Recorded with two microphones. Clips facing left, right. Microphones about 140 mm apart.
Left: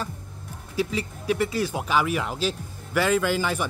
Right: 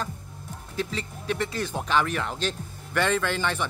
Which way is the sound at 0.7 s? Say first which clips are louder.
Left 4 dB; 5° left (ahead or behind).